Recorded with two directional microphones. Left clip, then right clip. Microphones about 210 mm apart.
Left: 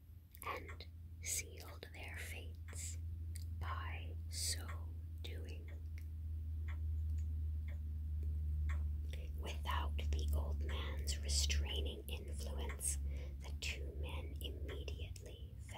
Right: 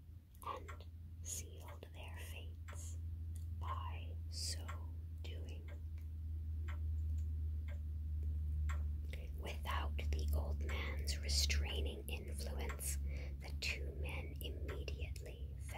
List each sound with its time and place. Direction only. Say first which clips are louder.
0.4 s a sound: left 1 dB; 20° left (ahead or behind)
1.2 s whispering: left 5 dB; 25° left (ahead or behind)
3.6 s whispering: even; 20° left (ahead or behind)
9.1 s whispering: right 1 dB; 5° right (ahead or behind)